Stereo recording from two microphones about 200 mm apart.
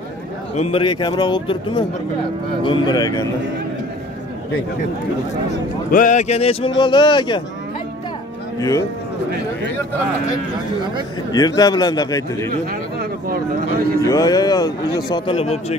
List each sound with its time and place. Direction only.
0.6 s a man's voice: 30° left (ahead or behind)
5.9 s a man's voice: 40° left (ahead or behind); by 7.4 s 25° left (ahead or behind)
8.5 s speech: 15° left (ahead or behind)
11.3 s a man's voice: 20° left (ahead or behind)
13.0 s a sound: 50° right (ahead or behind)
14.0 s a man's voice: 20° left (ahead or behind)